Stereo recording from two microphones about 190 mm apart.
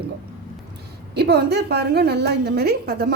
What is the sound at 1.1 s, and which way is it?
A woman's voice, 60° right (ahead or behind).